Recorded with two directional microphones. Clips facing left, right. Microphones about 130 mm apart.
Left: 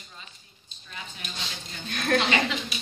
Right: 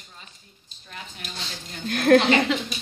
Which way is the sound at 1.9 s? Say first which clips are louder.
Right 8 dB; 65° right (ahead or behind).